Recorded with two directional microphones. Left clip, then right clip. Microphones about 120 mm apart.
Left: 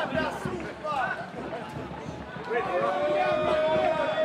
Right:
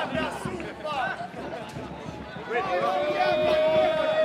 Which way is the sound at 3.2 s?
35° right (ahead or behind).